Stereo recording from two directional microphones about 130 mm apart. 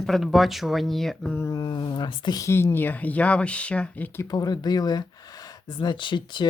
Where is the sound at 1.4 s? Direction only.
25° left (ahead or behind).